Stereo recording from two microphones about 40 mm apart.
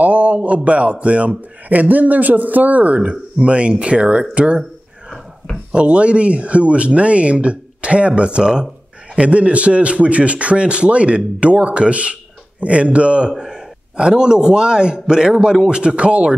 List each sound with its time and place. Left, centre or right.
0.0 s a sound: right
0.7 s a man's voice: right
3.0 s a man's voice: right
4.1 s speech: centre
5.7 s a man's voice: right
13.9 s a man's voice: right